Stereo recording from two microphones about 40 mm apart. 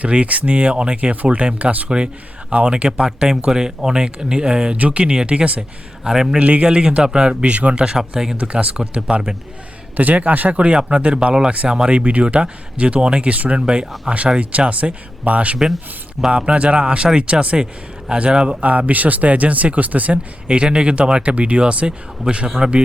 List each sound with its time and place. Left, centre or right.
0.0 s speech: right
1.1 s speech: right
6.1 s a man's voice: centre
6.4 s speech: right
6.7 s speech: right
10.0 s speech: right
10.5 s speech: right
13.3 s speech: right
13.6 s speech: right
18.6 s speech: right
20.5 s speech: right